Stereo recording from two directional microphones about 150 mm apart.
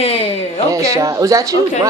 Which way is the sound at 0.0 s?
45° left (ahead or behind).